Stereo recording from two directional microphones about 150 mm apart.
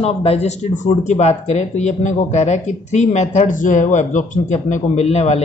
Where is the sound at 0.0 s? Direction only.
40° left (ahead or behind).